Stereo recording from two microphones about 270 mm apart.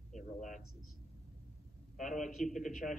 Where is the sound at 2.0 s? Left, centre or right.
Left.